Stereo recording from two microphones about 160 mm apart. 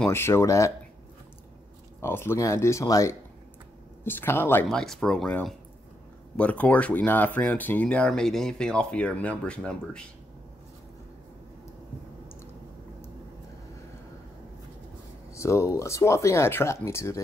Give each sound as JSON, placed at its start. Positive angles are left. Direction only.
{"t": 0.0, "sound": "speech", "side_deg": 15}
{"t": 2.0, "sound": "speech", "side_deg": 15}
{"t": 4.6, "sound": "speech", "side_deg": 5}
{"t": 15.3, "sound": "speech", "side_deg": 15}